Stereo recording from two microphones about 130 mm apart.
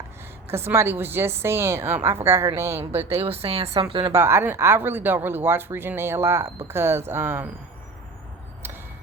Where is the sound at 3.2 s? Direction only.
50° right (ahead or behind).